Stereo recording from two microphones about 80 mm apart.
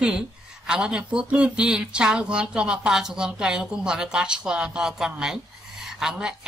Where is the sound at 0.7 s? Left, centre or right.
Centre.